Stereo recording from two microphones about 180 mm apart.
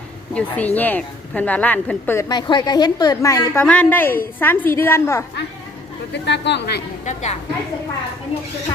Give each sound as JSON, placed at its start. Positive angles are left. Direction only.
{"t": 0.3, "sound": "a woman's voice", "side_deg": 10}
{"t": 2.3, "sound": "a woman's voice", "side_deg": 25}
{"t": 6.2, "sound": "speech", "side_deg": 70}
{"t": 7.0, "sound": "a woman's voice", "side_deg": 40}